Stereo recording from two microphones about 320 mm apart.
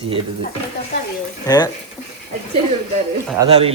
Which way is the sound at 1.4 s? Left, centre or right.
Centre.